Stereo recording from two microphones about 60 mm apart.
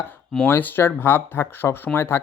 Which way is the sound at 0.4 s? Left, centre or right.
Left.